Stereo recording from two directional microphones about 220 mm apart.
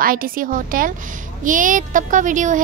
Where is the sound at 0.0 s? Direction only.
40° right (ahead or behind).